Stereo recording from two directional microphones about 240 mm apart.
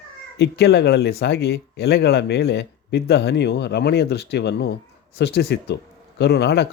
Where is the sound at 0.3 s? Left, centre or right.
Left.